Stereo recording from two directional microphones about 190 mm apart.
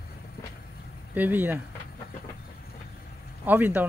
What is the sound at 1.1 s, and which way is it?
Speech, 10° right (ahead or behind).